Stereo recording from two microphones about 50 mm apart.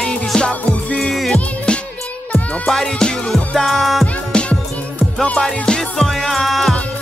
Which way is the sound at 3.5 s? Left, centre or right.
Centre.